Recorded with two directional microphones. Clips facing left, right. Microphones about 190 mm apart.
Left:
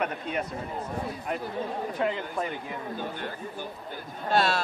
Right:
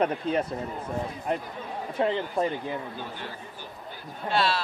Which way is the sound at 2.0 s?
30° right (ahead or behind).